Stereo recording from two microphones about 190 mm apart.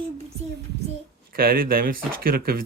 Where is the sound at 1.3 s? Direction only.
50° right (ahead or behind).